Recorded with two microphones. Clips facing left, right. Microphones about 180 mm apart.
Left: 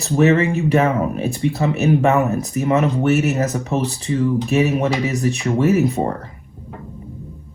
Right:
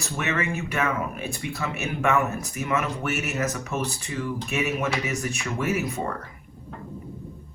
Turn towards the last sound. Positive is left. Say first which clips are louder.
# left 10 dB
turn(degrees=30)  # may be behind; listen again after turning